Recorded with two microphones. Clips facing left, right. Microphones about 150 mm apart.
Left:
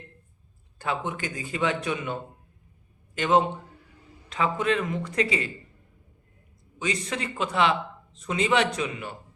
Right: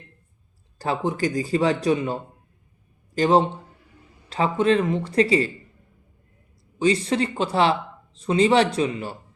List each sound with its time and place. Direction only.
0.8 s speech: 35° right (ahead or behind)
6.7 s speech: 30° right (ahead or behind)